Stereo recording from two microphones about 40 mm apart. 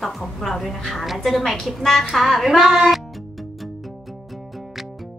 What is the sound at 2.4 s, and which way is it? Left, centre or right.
Speech, centre.